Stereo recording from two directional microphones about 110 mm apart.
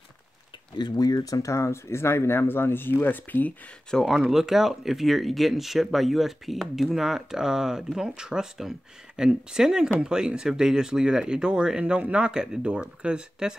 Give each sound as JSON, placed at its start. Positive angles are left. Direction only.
{"t": 0.7, "sound": "speech", "side_deg": 40}
{"t": 4.0, "sound": "speech", "side_deg": -5}